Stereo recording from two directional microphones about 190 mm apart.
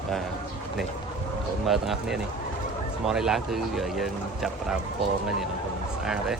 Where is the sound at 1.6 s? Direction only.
Centre (ahead or behind).